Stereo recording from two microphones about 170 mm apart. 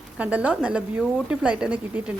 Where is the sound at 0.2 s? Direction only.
5° right (ahead or behind).